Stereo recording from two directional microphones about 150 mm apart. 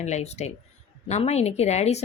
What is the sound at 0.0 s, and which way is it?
Speech, 50° left (ahead or behind).